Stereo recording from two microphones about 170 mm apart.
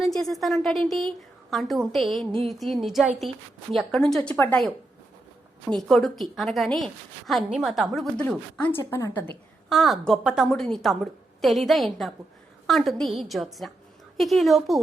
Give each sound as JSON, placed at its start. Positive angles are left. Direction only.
{"t": 0.0, "sound": "a woman's voice", "side_deg": 0}
{"t": 8.8, "sound": "a woman's voice", "side_deg": 20}
{"t": 9.6, "sound": "a woman's voice", "side_deg": 0}